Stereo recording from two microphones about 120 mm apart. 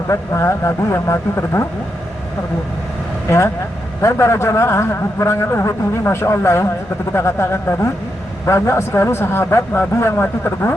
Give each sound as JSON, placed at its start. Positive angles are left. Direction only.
{"t": 0.1, "sound": "a man's voice", "side_deg": 25}
{"t": 3.2, "sound": "a man's voice", "side_deg": 25}